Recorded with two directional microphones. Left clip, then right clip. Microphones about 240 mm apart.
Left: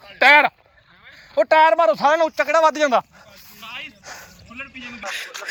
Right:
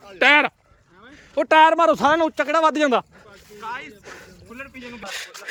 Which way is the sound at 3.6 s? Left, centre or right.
Centre.